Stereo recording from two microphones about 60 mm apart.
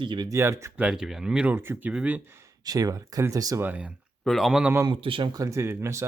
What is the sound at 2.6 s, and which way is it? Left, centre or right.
Speech, right.